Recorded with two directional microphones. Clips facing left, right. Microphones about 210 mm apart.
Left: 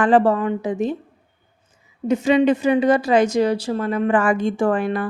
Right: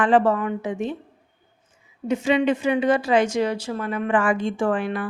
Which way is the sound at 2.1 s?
40° left (ahead or behind).